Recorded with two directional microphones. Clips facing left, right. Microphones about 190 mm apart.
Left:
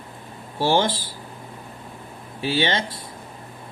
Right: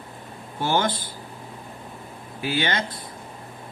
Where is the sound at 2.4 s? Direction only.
25° left (ahead or behind).